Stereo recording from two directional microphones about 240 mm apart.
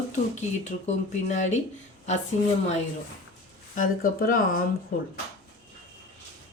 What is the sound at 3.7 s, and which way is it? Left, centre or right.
Speech, left.